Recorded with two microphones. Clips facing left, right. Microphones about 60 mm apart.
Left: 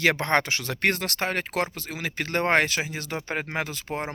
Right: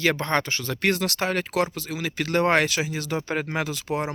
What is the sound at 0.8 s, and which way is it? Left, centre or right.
Speech, left.